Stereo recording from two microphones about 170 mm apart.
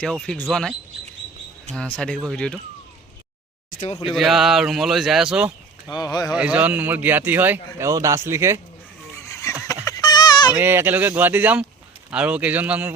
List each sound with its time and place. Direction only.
0.0 s a man's voice: 5° left (ahead or behind)
1.7 s a man's voice: 5° left (ahead or behind)
4.0 s a man's voice: centre (ahead or behind)
5.9 s speech: 25° left (ahead or behind)
6.3 s speech: 5° right (ahead or behind)
9.3 s a sound: 15° left (ahead or behind)
10.5 s speech: 15° right (ahead or behind)